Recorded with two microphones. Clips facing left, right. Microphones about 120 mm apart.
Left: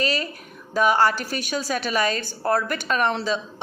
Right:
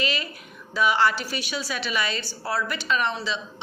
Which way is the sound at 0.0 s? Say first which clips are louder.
Left 4 dB; 40° left (ahead or behind).